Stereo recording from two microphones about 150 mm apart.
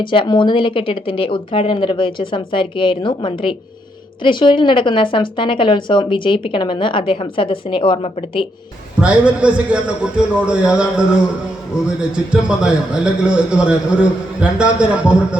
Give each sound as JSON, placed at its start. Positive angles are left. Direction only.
{"t": 0.0, "sound": "speech", "side_deg": 35}
{"t": 9.0, "sound": "a man's voice", "side_deg": -10}